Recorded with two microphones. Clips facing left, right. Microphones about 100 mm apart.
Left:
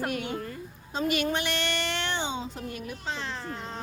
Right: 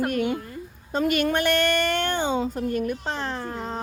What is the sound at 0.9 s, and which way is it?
A woman's voice, 50° right (ahead or behind).